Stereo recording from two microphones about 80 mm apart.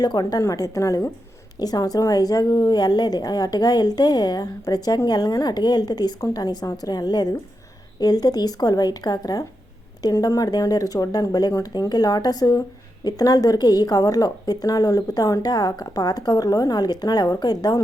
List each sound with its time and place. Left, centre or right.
0.0 s a woman's voice: left
0.4 s a woman's voice: left
1.5 s a woman's voice: left